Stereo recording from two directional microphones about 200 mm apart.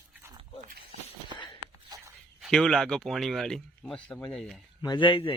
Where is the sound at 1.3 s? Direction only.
25° left (ahead or behind).